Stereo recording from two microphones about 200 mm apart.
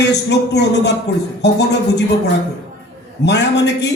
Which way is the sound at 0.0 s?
60° left (ahead or behind).